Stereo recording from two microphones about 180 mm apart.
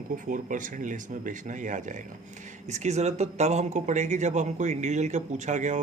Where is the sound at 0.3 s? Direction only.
45° right (ahead or behind).